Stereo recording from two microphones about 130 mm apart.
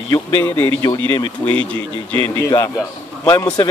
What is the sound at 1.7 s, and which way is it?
Speech, 40° right (ahead or behind).